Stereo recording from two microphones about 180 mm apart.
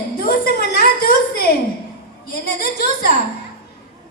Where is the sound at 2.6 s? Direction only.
55° left (ahead or behind).